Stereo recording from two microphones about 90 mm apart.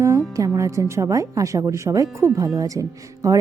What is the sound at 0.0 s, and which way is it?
Speech, 35° right (ahead or behind).